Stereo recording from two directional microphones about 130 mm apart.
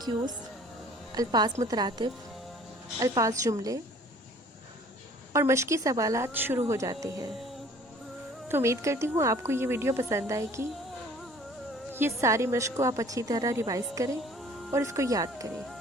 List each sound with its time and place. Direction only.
0.0 s a woman's voice: 30° right (ahead or behind)
5.3 s a woman's voice: 20° right (ahead or behind)
8.4 s a woman's voice: 20° right (ahead or behind)
11.9 s a woman's voice: 20° right (ahead or behind)